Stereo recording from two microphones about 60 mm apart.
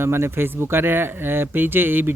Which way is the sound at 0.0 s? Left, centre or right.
Right.